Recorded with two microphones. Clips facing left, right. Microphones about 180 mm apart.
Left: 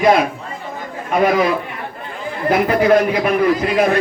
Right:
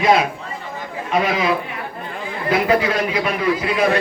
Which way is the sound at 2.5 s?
50° left (ahead or behind).